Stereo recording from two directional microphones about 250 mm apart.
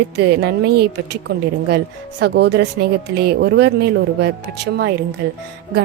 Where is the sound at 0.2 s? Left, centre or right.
Right.